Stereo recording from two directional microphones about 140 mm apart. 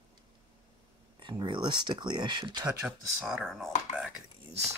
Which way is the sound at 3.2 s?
5° right (ahead or behind).